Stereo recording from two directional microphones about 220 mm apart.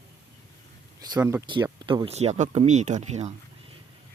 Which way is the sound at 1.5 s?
20° right (ahead or behind).